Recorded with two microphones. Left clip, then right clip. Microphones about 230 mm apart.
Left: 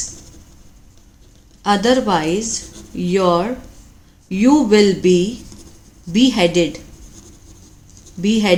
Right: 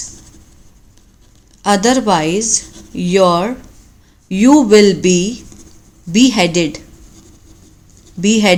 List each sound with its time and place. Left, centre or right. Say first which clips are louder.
1.6 s a woman's voice: right 2 dB; right
8.2 s a woman's voice: right 4 dB; right